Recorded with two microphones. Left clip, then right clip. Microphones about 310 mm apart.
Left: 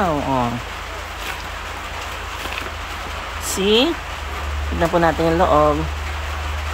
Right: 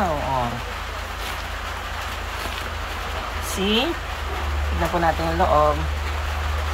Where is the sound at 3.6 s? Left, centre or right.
Centre.